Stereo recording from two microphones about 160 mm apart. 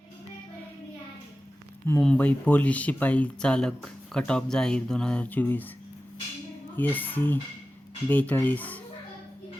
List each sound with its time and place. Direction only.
2.0 s speech: 5° left (ahead or behind)
6.7 s speech: 10° left (ahead or behind)